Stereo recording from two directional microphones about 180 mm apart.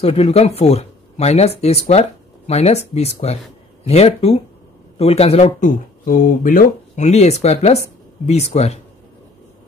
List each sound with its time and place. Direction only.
0.0 s speech: 35° left (ahead or behind)